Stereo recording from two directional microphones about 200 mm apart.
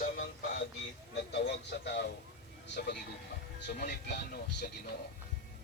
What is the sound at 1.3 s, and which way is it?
Speech, 55° left (ahead or behind).